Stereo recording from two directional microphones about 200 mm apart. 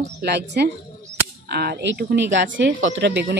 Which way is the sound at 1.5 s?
50° right (ahead or behind).